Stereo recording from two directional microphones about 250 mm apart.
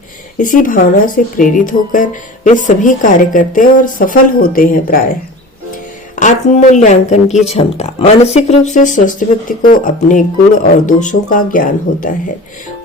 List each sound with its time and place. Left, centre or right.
0.3 s speech: left
6.1 s speech: left